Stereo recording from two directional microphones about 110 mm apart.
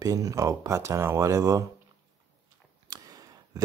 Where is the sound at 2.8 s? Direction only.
35° right (ahead or behind).